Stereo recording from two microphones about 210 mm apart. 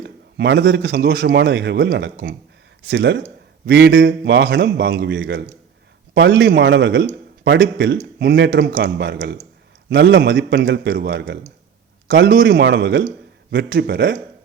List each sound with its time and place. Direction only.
0.0 s a man's voice: 55° right (ahead or behind)